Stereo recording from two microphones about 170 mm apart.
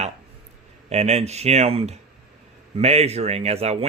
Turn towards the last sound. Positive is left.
turn(degrees=-35)  # may be behind; listen again after turning